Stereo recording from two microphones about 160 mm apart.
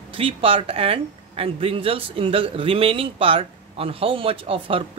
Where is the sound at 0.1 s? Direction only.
35° right (ahead or behind).